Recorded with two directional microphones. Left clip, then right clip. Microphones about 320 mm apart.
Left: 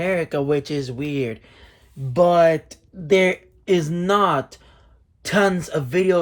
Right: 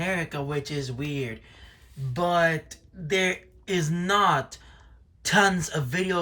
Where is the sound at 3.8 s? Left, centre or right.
Centre.